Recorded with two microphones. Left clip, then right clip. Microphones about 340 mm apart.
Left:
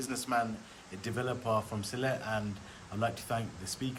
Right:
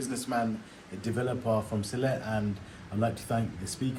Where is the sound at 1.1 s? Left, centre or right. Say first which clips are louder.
Right 3 dB; centre.